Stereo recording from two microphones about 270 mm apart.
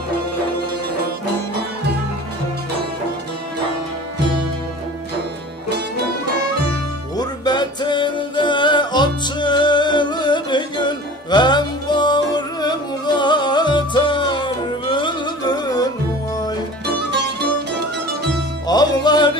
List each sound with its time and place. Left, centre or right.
7.2 s music: centre
16.8 s music: right
18.7 s music: centre